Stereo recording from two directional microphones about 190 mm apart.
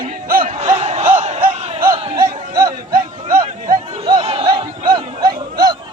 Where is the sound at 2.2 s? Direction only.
15° right (ahead or behind).